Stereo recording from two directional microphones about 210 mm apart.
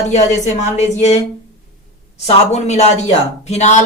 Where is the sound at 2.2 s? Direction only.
30° left (ahead or behind).